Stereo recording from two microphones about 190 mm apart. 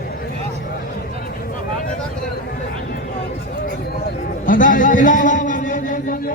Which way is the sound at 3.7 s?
50° left (ahead or behind).